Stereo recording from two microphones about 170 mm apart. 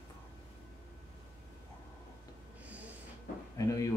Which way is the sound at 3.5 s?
20° left (ahead or behind).